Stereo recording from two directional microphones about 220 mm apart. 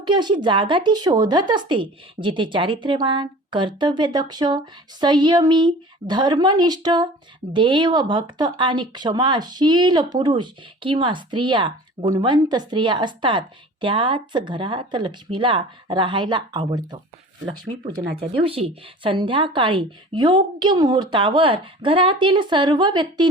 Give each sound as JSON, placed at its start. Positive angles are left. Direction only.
{"t": 0.0, "sound": "speech", "side_deg": -20}